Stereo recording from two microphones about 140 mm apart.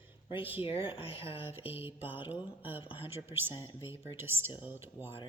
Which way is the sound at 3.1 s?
15° right (ahead or behind).